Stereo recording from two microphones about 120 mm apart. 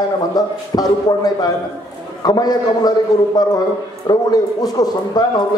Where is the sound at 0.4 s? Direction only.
35° left (ahead or behind).